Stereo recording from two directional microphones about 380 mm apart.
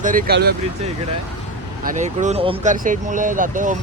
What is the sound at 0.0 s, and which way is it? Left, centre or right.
Speech, right.